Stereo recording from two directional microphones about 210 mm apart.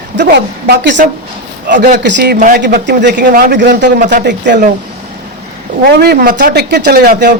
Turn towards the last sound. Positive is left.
turn(degrees=-45)  # may be behind; listen again after turning